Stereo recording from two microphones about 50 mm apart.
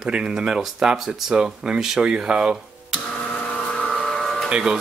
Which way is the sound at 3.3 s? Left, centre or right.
Centre.